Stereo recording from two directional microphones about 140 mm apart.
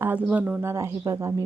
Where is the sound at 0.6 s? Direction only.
20° right (ahead or behind).